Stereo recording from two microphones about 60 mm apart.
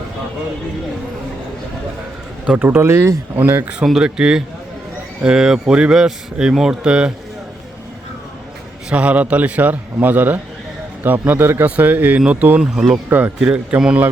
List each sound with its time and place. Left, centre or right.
2.6 s speech: right
2.9 s speech: right
3.3 s speech: right
3.8 s speech: centre
6.8 s a man's voice: centre
8.9 s a man's voice: right